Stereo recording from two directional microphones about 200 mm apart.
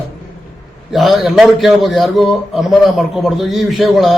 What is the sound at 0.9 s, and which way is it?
A man's voice, centre (ahead or behind).